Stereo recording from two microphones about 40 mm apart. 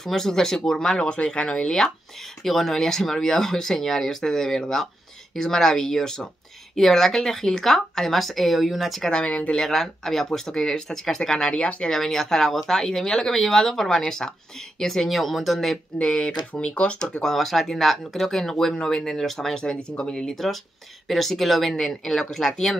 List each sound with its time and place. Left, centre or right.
0.0 s speech: centre
1.0 s speech: left
2.4 s speech: centre
16.0 s speech: left
17.2 s speech: centre
19.5 s speech: centre
21.1 s speech: centre